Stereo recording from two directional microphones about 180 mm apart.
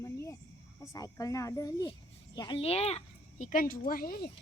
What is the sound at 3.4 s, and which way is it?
Speech, 50° left (ahead or behind).